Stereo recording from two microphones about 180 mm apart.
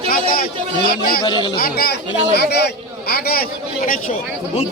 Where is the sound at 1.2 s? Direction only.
25° left (ahead or behind).